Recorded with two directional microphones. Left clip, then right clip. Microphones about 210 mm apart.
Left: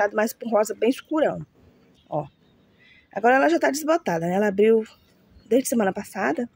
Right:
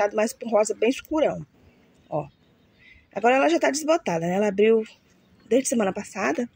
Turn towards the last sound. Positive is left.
turn(degrees=45)  # may be behind; listen again after turning